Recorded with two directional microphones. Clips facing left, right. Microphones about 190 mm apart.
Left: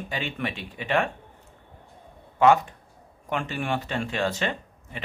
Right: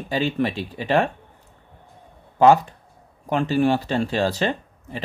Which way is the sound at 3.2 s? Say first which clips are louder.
Right 10 dB; 35° right (ahead or behind).